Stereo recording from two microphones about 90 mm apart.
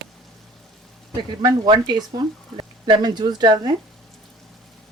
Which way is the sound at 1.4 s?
55° right (ahead or behind).